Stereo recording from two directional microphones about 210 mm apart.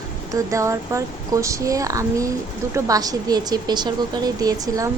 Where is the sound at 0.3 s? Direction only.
15° right (ahead or behind).